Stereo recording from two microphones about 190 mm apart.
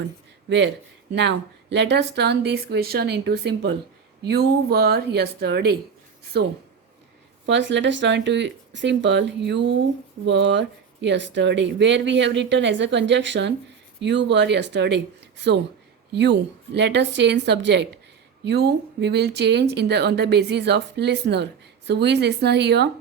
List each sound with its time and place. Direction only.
0.4 s speech: 65° right (ahead or behind)
7.4 s speech: 70° right (ahead or behind)
16.7 s speech: 65° right (ahead or behind)